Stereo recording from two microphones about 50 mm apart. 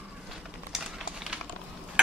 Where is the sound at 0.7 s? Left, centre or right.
Centre.